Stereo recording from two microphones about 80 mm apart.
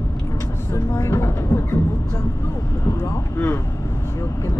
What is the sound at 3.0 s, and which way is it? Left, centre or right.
Speech, left.